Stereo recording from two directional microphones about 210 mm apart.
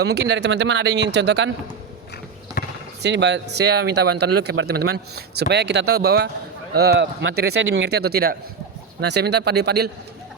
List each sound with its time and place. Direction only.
0.0 s speech: 50° right (ahead or behind)
2.6 s basketball bounce: 45° left (ahead or behind)
3.0 s a man's voice: 55° right (ahead or behind)